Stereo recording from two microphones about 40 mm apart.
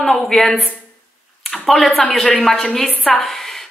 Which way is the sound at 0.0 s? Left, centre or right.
Centre.